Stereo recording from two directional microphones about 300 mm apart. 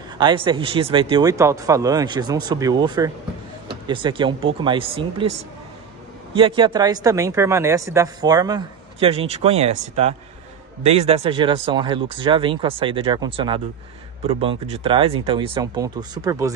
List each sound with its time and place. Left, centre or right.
0.2 s speech: centre